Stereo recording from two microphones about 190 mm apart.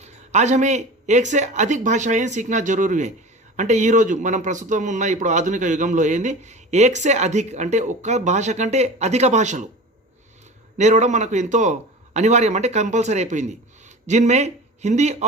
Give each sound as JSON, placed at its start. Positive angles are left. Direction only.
{"t": 0.0, "sound": "a man's voice", "side_deg": -35}
{"t": 10.8, "sound": "a man's voice", "side_deg": -35}